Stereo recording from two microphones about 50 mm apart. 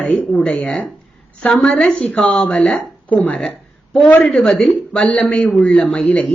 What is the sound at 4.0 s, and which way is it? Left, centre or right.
Speech, left.